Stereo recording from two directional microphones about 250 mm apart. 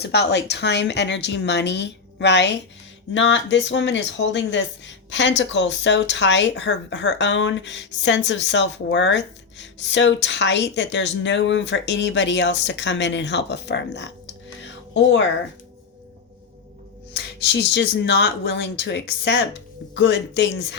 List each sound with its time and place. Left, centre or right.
0.0 s speech: left
17.4 s speech: left